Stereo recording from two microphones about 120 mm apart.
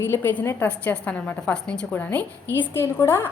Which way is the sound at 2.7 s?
20° left (ahead or behind).